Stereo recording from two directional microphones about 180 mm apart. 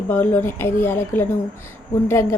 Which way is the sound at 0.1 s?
10° left (ahead or behind).